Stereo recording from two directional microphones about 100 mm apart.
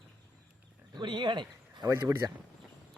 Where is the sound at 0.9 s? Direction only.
50° right (ahead or behind).